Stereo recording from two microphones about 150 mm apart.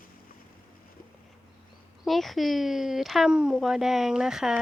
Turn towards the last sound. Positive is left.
turn(degrees=-5)  # may be behind; listen again after turning